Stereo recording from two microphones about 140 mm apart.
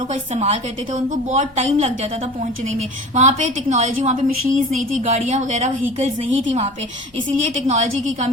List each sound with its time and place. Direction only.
0.1 s a woman's voice: 50° right (ahead or behind)
4.4 s a woman's voice: 65° right (ahead or behind)